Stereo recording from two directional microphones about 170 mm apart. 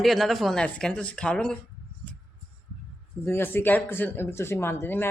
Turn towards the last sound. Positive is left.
turn(degrees=15)  # may be behind; listen again after turning